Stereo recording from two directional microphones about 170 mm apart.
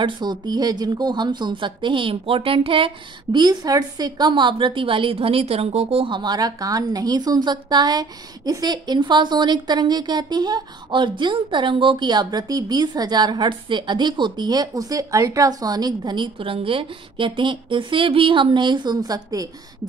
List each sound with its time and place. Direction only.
0.0 s speech: 25° right (ahead or behind)